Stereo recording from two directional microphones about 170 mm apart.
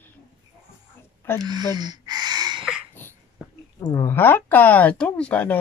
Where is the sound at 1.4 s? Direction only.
25° right (ahead or behind).